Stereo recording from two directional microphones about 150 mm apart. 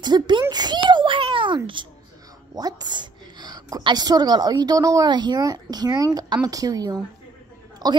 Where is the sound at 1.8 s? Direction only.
35° right (ahead or behind).